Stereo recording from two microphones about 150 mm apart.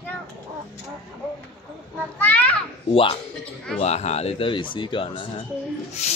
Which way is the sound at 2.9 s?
40° left (ahead or behind).